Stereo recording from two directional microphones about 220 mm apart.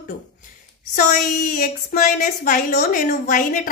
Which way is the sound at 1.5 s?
35° left (ahead or behind).